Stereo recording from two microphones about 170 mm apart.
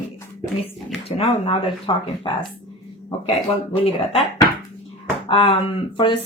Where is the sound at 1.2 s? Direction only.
35° left (ahead or behind).